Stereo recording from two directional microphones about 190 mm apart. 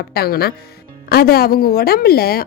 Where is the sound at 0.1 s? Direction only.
55° left (ahead or behind).